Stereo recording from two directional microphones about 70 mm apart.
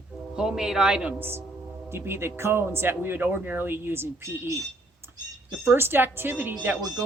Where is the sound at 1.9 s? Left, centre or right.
Right.